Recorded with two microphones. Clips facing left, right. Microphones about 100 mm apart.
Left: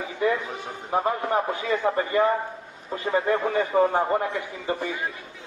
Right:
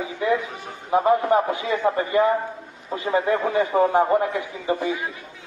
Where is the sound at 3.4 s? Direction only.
15° right (ahead or behind).